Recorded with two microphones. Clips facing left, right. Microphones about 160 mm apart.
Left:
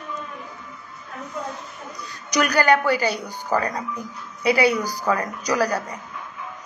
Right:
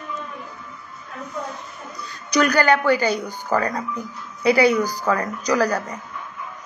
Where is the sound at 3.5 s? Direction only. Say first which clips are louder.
Right 1 dB; 10° left (ahead or behind).